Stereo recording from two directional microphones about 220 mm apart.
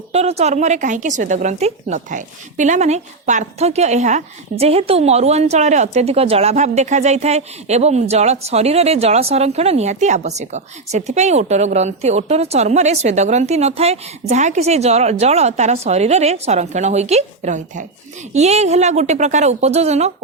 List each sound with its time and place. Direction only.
0.1 s a woman's voice: 30° right (ahead or behind)